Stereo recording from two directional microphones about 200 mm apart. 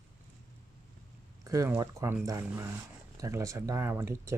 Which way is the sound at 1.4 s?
15° right (ahead or behind).